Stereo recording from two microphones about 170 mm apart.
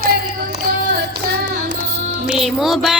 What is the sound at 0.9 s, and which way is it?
Music, 55° right (ahead or behind).